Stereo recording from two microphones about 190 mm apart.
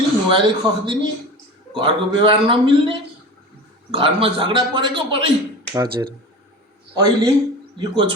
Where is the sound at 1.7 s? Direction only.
25° right (ahead or behind).